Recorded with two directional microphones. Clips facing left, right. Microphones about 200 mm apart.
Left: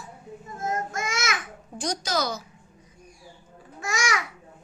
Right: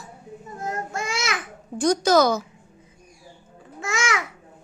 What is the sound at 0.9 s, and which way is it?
Babbling, 30° right (ahead or behind).